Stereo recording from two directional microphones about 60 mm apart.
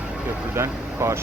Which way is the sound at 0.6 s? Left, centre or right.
Right.